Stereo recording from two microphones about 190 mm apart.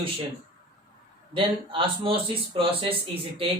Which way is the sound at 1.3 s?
25° right (ahead or behind).